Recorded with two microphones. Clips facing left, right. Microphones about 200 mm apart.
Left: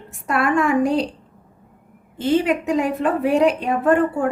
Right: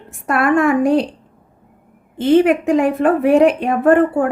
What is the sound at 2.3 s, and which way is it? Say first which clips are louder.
Speech: right 6 dB; 55° right (ahead or behind).